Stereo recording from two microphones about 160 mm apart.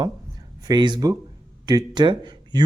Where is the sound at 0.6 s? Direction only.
25° right (ahead or behind).